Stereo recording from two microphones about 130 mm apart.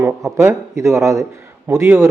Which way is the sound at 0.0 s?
25° right (ahead or behind).